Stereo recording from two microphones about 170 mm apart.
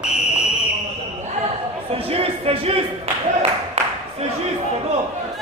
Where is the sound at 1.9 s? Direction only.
35° right (ahead or behind).